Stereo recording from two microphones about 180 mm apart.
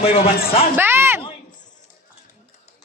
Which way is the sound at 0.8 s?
10° right (ahead or behind).